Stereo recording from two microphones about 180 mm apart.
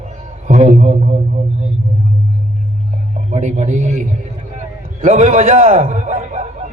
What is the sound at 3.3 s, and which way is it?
A man's voice, 40° right (ahead or behind).